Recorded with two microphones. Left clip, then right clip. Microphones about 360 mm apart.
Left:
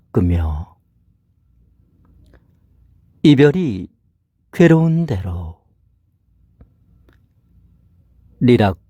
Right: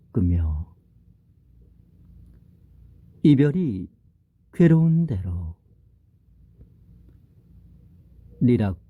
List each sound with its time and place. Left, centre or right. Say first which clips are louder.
0.1 s speech: left 8 dB; left
3.2 s speech: left 8 dB; left
8.4 s speech: left 9 dB; left